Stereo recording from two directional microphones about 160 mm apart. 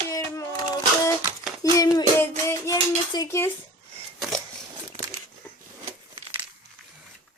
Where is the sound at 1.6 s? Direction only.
20° left (ahead or behind).